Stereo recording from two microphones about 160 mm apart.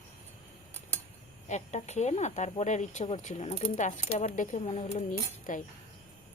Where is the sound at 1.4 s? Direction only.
45° left (ahead or behind).